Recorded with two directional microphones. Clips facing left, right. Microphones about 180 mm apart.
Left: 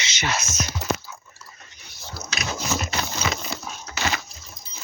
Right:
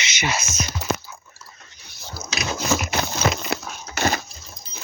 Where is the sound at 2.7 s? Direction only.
90° right.